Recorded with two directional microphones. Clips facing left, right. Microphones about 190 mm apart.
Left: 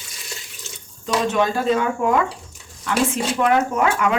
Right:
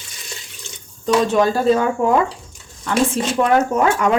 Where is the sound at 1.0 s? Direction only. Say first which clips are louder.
Right 4 dB; 35° right (ahead or behind).